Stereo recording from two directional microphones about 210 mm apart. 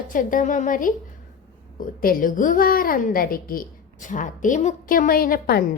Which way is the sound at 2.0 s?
40° left (ahead or behind).